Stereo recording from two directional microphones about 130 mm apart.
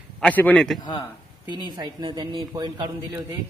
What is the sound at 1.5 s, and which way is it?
Speech, 35° right (ahead or behind).